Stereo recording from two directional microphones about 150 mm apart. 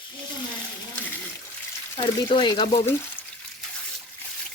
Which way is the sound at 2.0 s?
30° left (ahead or behind).